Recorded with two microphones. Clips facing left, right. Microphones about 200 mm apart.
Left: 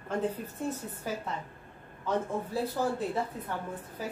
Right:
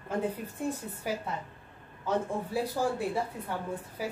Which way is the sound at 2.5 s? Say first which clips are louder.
Right 1 dB; 10° right (ahead or behind).